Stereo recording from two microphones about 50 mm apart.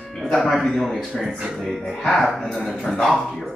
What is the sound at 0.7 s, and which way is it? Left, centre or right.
Speech, centre.